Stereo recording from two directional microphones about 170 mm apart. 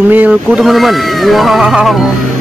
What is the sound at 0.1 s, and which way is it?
Speech, 5° right (ahead or behind).